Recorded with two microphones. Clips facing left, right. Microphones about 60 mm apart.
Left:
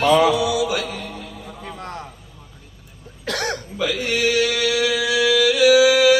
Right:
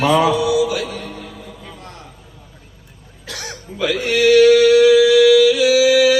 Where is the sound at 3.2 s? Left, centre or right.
Left.